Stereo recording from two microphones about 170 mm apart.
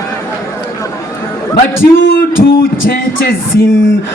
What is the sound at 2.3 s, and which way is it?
Music, 60° left (ahead or behind).